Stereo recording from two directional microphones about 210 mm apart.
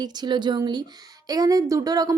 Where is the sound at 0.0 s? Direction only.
20° right (ahead or behind).